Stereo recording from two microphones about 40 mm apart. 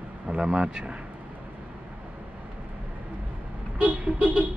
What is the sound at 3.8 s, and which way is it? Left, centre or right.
Vehicle, right.